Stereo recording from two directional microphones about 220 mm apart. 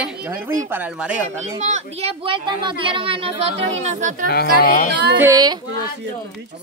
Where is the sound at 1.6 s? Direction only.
30° right (ahead or behind).